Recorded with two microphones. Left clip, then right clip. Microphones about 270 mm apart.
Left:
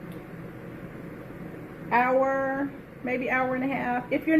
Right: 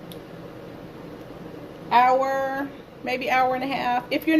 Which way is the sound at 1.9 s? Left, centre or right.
Right.